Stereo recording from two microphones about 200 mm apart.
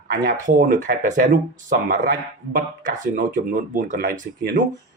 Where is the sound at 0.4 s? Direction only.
40° right (ahead or behind).